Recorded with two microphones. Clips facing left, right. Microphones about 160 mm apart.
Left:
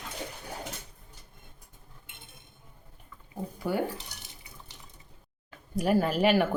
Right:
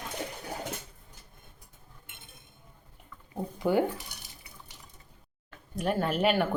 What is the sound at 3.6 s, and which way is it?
Cutlery, 20° right (ahead or behind).